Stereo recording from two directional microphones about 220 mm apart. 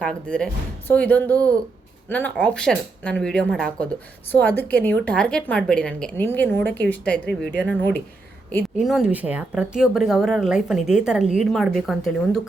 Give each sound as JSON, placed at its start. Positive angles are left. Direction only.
{"t": 0.0, "sound": "a woman's voice", "side_deg": 5}